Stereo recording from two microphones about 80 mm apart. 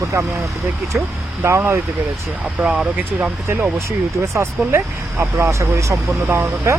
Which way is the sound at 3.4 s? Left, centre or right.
Right.